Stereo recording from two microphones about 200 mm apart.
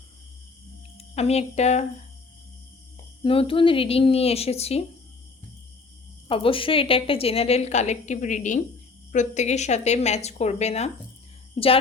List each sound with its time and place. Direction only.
0.9 s speech: 30° left (ahead or behind)
3.2 s speech: 25° left (ahead or behind)
6.2 s a woman's voice: 25° left (ahead or behind)